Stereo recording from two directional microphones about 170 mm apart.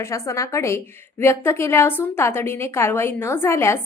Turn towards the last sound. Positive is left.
turn(degrees=15)  # may be behind; listen again after turning